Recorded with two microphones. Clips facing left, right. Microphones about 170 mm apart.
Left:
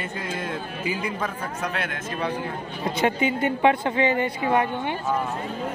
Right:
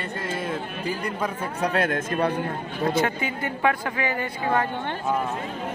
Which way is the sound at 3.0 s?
20° left (ahead or behind).